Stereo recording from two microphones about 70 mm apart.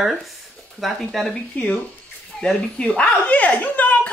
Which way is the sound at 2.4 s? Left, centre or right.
Centre.